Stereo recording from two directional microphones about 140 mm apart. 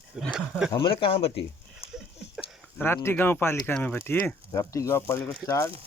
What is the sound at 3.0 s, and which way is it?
Speech, 15° left (ahead or behind).